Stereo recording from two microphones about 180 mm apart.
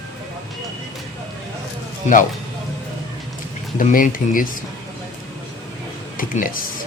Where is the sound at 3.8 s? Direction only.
45° left (ahead or behind).